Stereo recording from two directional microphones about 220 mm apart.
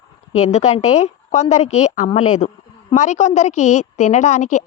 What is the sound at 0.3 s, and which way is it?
A woman's voice, 30° left (ahead or behind).